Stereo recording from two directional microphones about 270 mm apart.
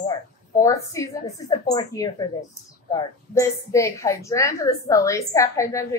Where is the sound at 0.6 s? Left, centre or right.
Centre.